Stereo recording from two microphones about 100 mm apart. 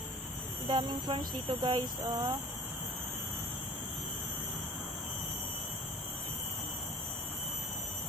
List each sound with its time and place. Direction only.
0.7 s speech: 50° right (ahead or behind)
2.1 s speech: 30° right (ahead or behind)